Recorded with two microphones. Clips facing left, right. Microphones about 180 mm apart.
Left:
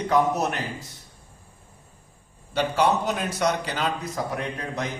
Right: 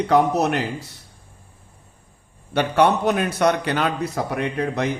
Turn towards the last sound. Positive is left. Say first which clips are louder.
# right 7 dB
turn(degrees=-65)  # may be behind; listen again after turning